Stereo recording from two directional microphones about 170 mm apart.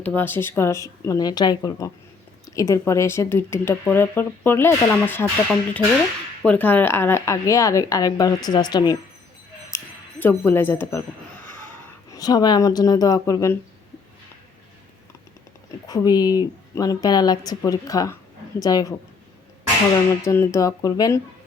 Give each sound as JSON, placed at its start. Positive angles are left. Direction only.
{"t": 0.0, "sound": "a woman's voice", "side_deg": 10}
{"t": 9.7, "sound": "a sound", "side_deg": 10}
{"t": 12.1, "sound": "a woman's voice", "side_deg": 20}
{"t": 15.9, "sound": "a woman's voice", "side_deg": 20}
{"t": 20.2, "sound": "a woman's voice", "side_deg": 15}